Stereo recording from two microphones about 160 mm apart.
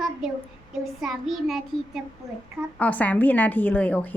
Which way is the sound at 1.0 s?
Centre (ahead or behind).